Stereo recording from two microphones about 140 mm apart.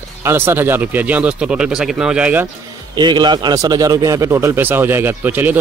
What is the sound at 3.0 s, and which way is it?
A man's voice, 30° right (ahead or behind).